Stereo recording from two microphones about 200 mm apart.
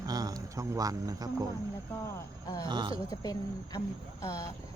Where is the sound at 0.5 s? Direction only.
15° right (ahead or behind).